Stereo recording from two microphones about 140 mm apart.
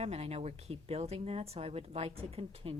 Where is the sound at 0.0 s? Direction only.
50° right (ahead or behind).